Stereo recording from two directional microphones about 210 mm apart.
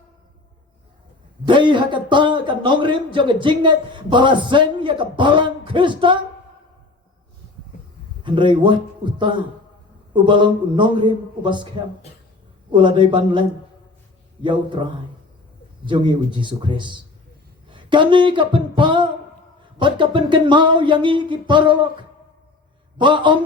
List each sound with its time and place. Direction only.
1.5 s a man's voice: 20° right (ahead or behind)
8.2 s a man's voice: 20° right (ahead or behind)
12.7 s a man's voice: 25° right (ahead or behind)
14.4 s a man's voice: 20° right (ahead or behind)
15.9 s a man's voice: 20° right (ahead or behind)
23.0 s a man's voice: 25° right (ahead or behind)